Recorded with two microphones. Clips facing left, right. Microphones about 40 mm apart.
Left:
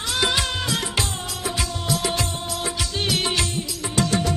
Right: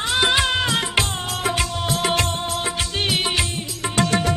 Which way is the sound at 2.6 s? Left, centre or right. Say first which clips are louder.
Right 2 dB; right.